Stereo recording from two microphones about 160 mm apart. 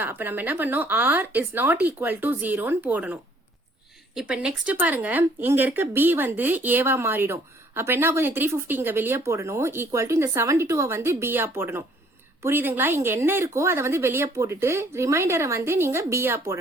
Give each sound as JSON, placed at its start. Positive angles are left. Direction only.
{"t": 0.0, "sound": "speech", "side_deg": -10}